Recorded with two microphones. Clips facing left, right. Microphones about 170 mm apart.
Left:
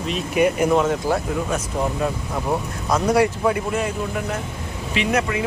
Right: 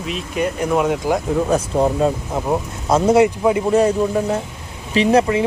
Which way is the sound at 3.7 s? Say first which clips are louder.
Right 9 dB; 35° right (ahead or behind).